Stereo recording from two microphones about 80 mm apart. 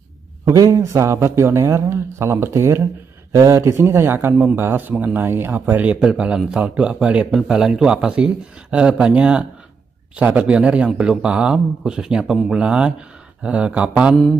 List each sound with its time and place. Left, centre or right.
0.5 s a man's voice: right; by 14.1 s centre